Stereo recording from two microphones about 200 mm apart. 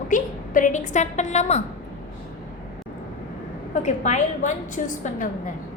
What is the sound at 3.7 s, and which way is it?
A woman's voice, 35° left (ahead or behind).